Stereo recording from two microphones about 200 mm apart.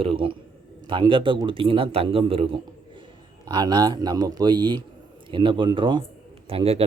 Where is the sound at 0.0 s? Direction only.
25° right (ahead or behind).